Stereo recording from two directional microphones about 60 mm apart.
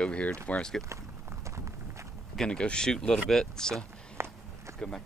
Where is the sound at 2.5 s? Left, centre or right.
Centre.